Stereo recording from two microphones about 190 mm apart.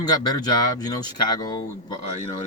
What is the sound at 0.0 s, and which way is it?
Speech, 20° left (ahead or behind).